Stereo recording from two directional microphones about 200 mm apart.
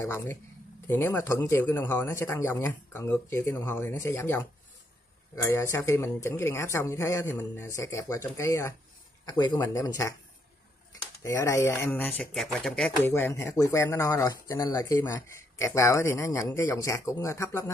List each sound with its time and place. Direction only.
0.0 s speech: 10° left (ahead or behind)
11.2 s speech: 15° left (ahead or behind)